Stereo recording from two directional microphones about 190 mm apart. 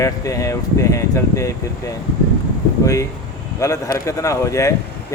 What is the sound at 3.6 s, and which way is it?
Speech, 15° left (ahead or behind).